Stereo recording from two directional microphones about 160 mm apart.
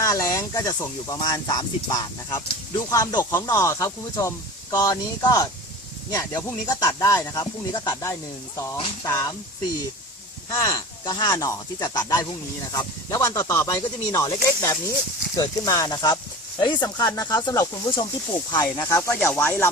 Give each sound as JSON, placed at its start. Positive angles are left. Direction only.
{"t": 0.0, "sound": "speech", "side_deg": 20}
{"t": 10.5, "sound": "speech", "side_deg": 20}